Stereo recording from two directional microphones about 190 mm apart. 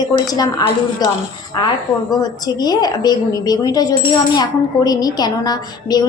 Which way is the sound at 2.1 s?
20° left (ahead or behind).